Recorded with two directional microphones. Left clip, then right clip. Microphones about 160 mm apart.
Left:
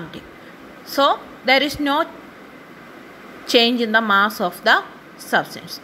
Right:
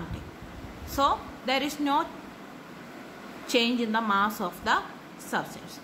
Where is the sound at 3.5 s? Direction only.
35° left (ahead or behind).